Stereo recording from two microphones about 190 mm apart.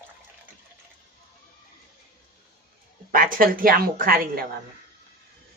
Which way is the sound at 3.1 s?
50° right (ahead or behind).